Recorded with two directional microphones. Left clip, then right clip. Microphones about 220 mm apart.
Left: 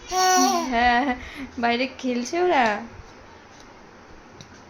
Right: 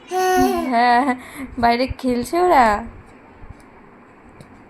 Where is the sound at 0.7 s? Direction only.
25° right (ahead or behind).